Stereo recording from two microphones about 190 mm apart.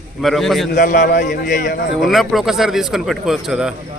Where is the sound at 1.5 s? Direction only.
40° left (ahead or behind).